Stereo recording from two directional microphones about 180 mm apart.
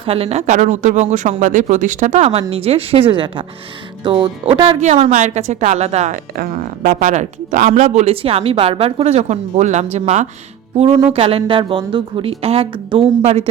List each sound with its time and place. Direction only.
0.0 s speech: 35° right (ahead or behind)
6.3 s speech: 50° right (ahead or behind); by 13.5 s 35° right (ahead or behind)